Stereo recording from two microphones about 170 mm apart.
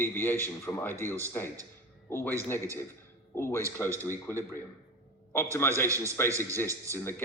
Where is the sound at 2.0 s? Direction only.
15° left (ahead or behind).